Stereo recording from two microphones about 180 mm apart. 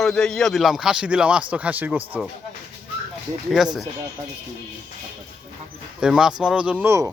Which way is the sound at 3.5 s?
5° right (ahead or behind).